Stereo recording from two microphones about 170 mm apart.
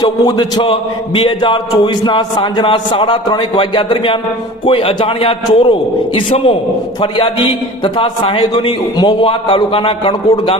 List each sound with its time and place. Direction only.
0.0 s a man's voice: 25° left (ahead or behind)